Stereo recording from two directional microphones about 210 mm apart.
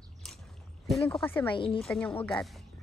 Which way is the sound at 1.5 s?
25° left (ahead or behind).